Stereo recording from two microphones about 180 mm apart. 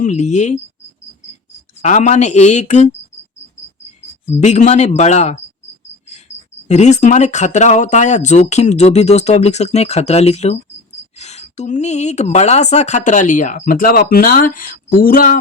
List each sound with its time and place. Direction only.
0.0 s speech: 40° left (ahead or behind)
1.8 s speech: 40° left (ahead or behind)
4.4 s speech: 40° left (ahead or behind)
6.7 s a woman's voice: 40° left (ahead or behind)